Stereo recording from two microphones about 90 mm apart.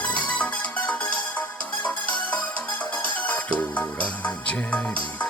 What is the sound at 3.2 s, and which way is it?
Music, 15° left (ahead or behind).